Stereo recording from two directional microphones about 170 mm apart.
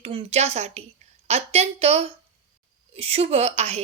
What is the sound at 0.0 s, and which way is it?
A woman's voice, 35° right (ahead or behind).